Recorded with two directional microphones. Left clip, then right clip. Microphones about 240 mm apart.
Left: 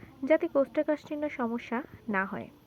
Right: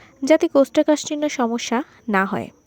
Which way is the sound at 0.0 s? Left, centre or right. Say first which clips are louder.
Right 10 dB; right.